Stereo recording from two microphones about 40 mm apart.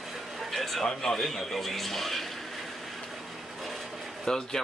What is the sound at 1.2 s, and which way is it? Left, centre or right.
Speech, centre.